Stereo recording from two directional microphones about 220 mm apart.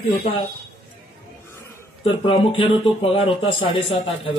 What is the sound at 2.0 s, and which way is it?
A man's voice, 25° left (ahead or behind).